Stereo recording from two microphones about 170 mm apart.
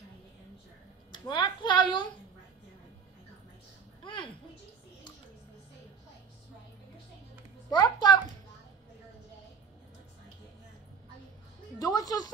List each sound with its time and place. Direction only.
1.1 s a child's voice: 25° left (ahead or behind)
4.0 s a sound: 30° left (ahead or behind)
7.7 s a child's voice: 25° left (ahead or behind)
11.8 s music: 20° left (ahead or behind)